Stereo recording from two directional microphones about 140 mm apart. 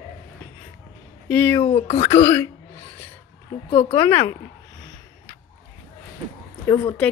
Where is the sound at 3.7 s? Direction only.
45° left (ahead or behind).